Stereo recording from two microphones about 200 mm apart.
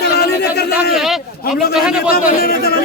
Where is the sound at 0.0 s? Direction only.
55° left (ahead or behind).